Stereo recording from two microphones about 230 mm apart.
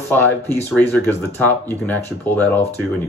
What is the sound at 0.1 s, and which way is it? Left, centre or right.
Speech, centre.